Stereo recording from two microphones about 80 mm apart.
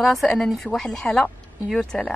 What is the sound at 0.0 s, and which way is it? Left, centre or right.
Speech, centre.